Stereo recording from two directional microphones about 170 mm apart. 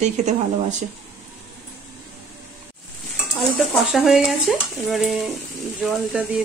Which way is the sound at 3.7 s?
Centre (ahead or behind).